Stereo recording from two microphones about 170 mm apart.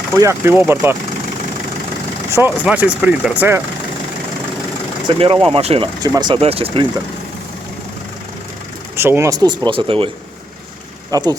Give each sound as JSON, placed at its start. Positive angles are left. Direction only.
{"t": 0.2, "sound": "speech", "side_deg": -15}
{"t": 2.3, "sound": "speech", "side_deg": -10}
{"t": 5.0, "sound": "speech", "side_deg": -30}
{"t": 6.0, "sound": "speech", "side_deg": -20}
{"t": 9.0, "sound": "speech", "side_deg": -15}
{"t": 11.1, "sound": "speech", "side_deg": -20}